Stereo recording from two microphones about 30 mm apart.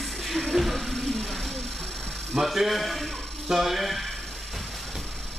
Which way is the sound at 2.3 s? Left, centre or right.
Centre.